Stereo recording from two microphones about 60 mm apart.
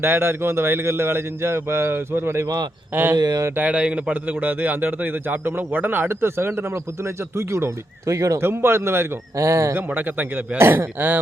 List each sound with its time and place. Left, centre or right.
0.0 s speech: right
2.9 s a man's voice: right
3.5 s a man's voice: right
8.4 s speech: right
9.4 s speech: right
9.7 s a man's voice: right